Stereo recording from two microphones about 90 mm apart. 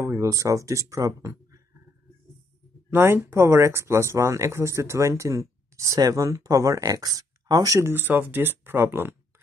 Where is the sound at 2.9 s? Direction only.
25° right (ahead or behind).